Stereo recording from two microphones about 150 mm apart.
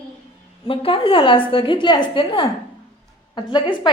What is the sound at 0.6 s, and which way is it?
A woman's voice, 40° left (ahead or behind).